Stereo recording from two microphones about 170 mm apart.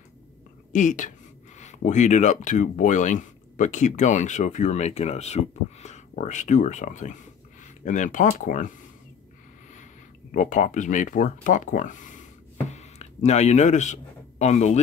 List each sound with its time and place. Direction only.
0.7 s speech: 50° left (ahead or behind)
10.3 s speech: 50° left (ahead or behind)